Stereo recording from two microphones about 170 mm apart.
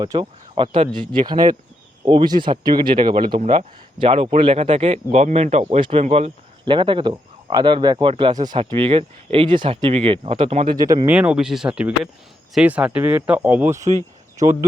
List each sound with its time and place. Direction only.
0.0 s speech: 25° right (ahead or behind)
3.4 s speech: 40° right (ahead or behind)
3.9 s speech: 30° right (ahead or behind)
10.8 s speech: 20° right (ahead or behind)